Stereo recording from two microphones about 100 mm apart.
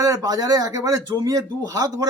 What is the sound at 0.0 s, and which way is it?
Speech, 35° right (ahead or behind).